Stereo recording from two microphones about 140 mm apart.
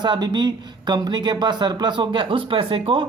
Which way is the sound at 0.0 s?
30° right (ahead or behind).